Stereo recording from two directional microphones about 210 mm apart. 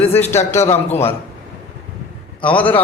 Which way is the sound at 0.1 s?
10° left (ahead or behind).